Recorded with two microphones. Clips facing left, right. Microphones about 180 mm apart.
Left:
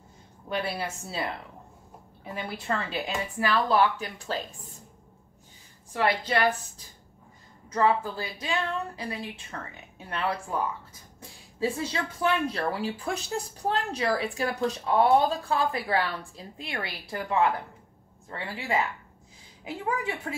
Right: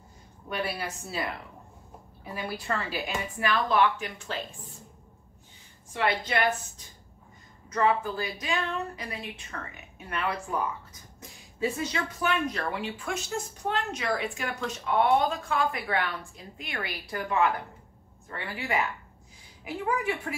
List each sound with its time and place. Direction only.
0.5 s speech: 25° left (ahead or behind)
2.3 s speech: 25° left (ahead or behind)
5.9 s speech: 35° left (ahead or behind)
7.7 s speech: 30° left (ahead or behind)